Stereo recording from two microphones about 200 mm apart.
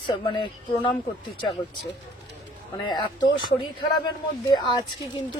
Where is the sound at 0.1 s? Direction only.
25° left (ahead or behind).